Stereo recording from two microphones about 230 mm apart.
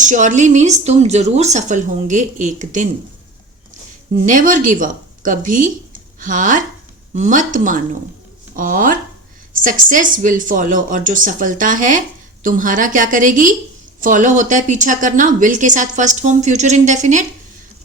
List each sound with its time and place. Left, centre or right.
0.0 s speech: right
4.2 s a woman's voice: right